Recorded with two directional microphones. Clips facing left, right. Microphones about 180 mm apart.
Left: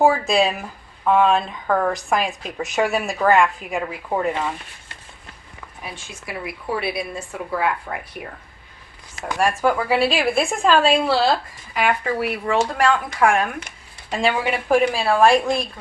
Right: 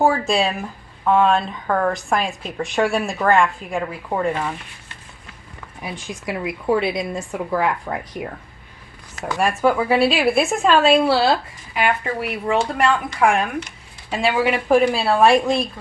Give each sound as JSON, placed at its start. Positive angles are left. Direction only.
{"t": 0.0, "sound": "speech", "side_deg": 0}
{"t": 5.8, "sound": "a woman's voice", "side_deg": -20}
{"t": 9.4, "sound": "speech", "side_deg": 0}